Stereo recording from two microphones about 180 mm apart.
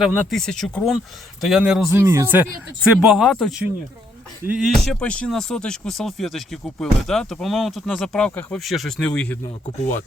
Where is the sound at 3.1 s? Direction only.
Centre (ahead or behind).